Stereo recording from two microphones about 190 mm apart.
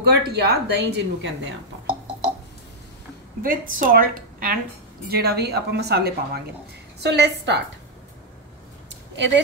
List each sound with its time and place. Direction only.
0.0 s speech: 60° right (ahead or behind)
3.4 s a woman's voice: 50° right (ahead or behind); by 7.6 s 65° right (ahead or behind)
9.1 s speech: 70° right (ahead or behind)